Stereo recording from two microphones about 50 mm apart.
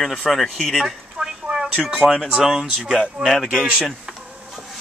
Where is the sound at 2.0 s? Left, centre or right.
Centre.